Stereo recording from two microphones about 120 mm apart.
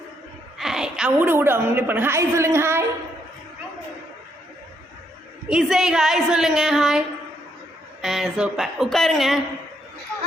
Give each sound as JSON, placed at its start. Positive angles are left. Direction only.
{"t": 0.6, "sound": "a sound", "side_deg": -5}
{"t": 1.3, "sound": "a woman's voice", "side_deg": -20}
{"t": 5.5, "sound": "speech", "side_deg": -5}
{"t": 8.0, "sound": "speech", "side_deg": -5}